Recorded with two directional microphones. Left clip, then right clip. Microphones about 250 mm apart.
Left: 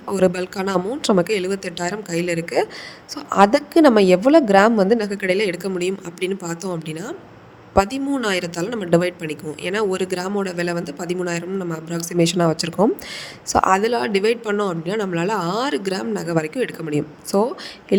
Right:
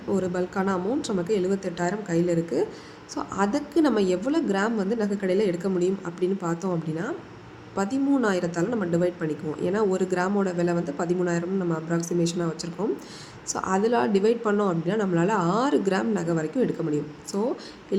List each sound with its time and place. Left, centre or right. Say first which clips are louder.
0.1 s speech: left 7 dB; left